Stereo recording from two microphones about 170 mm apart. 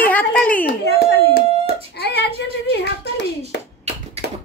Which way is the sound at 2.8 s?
75° left (ahead or behind).